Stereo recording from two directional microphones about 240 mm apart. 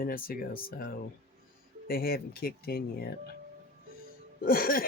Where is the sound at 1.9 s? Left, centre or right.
Left.